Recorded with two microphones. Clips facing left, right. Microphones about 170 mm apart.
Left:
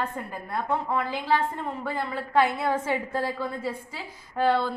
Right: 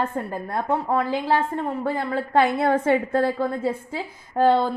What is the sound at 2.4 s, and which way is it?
A woman's voice, 65° right (ahead or behind).